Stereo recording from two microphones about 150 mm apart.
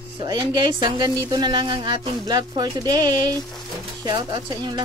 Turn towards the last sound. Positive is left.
turn(degrees=-30)  # may be behind; listen again after turning